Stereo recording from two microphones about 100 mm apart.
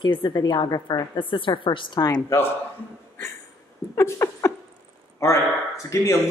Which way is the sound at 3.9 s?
30° left (ahead or behind).